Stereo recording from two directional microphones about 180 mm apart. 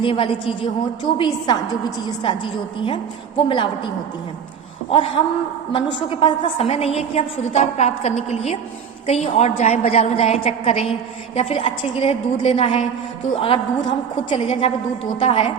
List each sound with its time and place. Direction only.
0.0 s a woman's voice: 30° left (ahead or behind)
4.9 s a woman's voice: 30° left (ahead or behind)